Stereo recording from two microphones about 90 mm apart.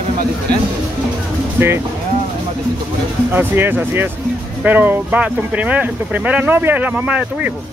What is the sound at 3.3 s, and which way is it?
Speech, 25° right (ahead or behind).